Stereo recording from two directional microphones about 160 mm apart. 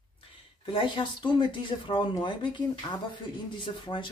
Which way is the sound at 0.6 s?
30° left (ahead or behind).